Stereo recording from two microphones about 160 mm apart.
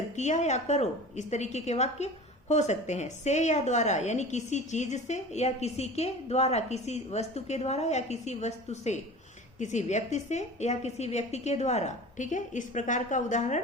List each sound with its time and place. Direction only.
0.2 s a woman's voice: 45° left (ahead or behind)